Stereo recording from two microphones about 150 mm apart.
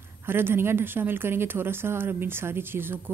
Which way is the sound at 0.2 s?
15° right (ahead or behind).